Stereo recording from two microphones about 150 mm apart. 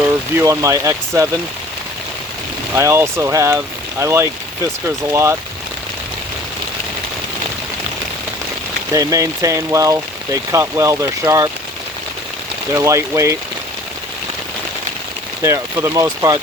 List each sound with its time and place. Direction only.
0.0 s speech: 20° right (ahead or behind)
2.7 s speech: 15° right (ahead or behind)
8.9 s speech: 20° right (ahead or behind)
12.7 s speech: 20° right (ahead or behind)
15.4 s speech: 20° right (ahead or behind)